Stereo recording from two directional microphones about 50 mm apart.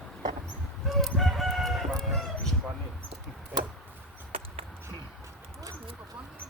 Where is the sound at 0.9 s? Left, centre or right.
Centre.